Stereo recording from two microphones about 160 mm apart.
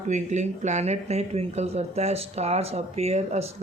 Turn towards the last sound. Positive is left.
turn(degrees=-40)  # may be behind; listen again after turning